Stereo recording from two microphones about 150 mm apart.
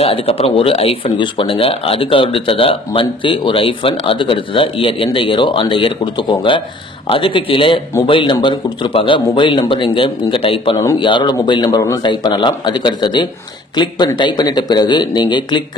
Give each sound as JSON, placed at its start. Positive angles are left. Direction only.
{"t": 0.0, "sound": "speech", "side_deg": 40}